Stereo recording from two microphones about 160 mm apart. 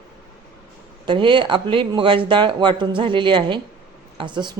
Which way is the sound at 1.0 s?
30° right (ahead or behind).